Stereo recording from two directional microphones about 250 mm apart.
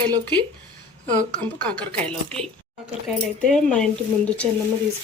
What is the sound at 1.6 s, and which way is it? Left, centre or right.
Speech, centre.